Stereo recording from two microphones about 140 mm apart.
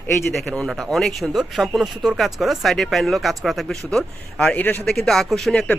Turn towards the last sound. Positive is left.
turn(degrees=5)  # may be behind; listen again after turning